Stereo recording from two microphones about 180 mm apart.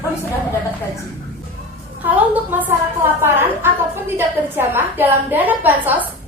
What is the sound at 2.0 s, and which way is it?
A woman's voice, 10° right (ahead or behind).